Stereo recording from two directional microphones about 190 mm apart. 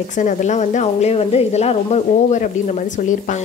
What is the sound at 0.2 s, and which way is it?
Speech, 40° left (ahead or behind).